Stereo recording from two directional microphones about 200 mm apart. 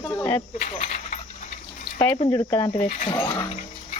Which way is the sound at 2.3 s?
10° left (ahead or behind).